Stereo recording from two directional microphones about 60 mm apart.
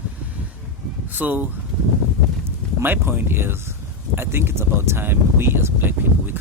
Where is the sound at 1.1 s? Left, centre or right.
Right.